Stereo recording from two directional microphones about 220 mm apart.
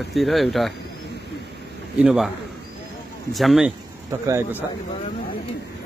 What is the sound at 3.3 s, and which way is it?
Speech, centre (ahead or behind).